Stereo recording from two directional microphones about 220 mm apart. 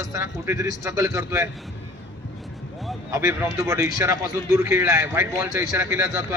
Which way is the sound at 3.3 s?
10° right (ahead or behind).